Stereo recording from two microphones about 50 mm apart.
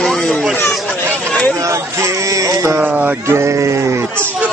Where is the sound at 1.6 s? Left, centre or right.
Right.